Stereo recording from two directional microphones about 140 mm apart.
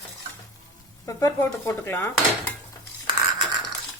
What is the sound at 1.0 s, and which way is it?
Speech, 20° left (ahead or behind).